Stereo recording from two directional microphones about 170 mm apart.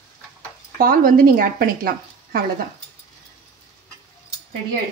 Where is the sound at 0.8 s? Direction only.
55° right (ahead or behind).